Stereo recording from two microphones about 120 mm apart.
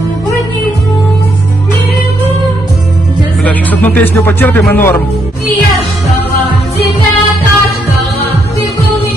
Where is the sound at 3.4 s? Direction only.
15° left (ahead or behind).